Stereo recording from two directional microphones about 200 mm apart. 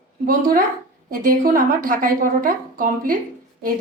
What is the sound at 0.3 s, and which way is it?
A woman's voice, 45° right (ahead or behind).